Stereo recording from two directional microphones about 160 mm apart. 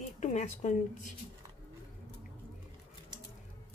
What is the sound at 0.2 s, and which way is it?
Speech, 50° left (ahead or behind).